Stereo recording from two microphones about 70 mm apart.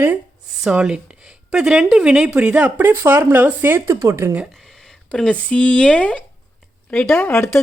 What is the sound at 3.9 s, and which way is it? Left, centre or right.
Speech, right.